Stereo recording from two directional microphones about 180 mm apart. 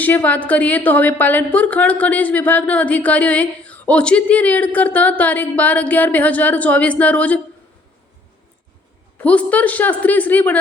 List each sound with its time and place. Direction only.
0.0 s a woman's voice: 10° left (ahead or behind)
9.1 s a woman's voice: 10° left (ahead or behind)